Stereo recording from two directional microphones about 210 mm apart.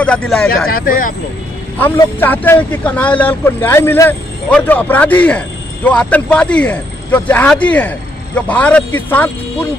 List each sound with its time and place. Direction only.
0.7 s speech: 45° left (ahead or behind)
1.8 s speech: 10° left (ahead or behind)